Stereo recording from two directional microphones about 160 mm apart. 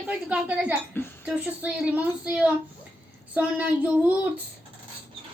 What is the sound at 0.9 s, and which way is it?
Speech, 10° left (ahead or behind).